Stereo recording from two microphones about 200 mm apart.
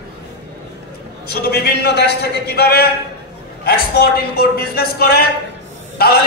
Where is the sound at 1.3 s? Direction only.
55° left (ahead or behind).